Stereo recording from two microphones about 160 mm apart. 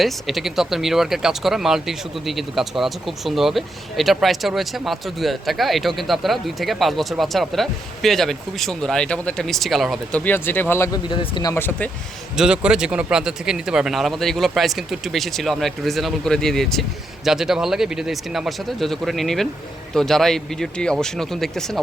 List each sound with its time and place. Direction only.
0.0 s speech: centre (ahead or behind); by 11.0 s 20° left (ahead or behind)
11.1 s speech: 30° left (ahead or behind)
11.5 s speech: 15° left (ahead or behind)
12.4 s speech: 5° right (ahead or behind)